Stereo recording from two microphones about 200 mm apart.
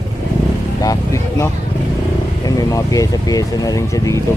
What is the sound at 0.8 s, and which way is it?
Speech, 15° left (ahead or behind).